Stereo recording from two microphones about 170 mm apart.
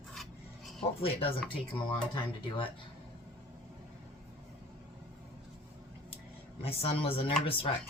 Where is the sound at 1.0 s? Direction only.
35° left (ahead or behind).